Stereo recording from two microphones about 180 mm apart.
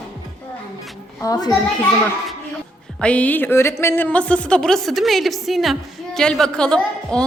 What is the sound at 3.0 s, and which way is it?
A woman's voice, 5° left (ahead or behind).